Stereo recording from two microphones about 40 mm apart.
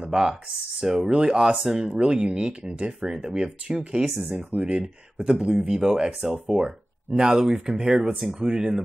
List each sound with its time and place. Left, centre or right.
0.1 s speech: centre
6.6 s speech: right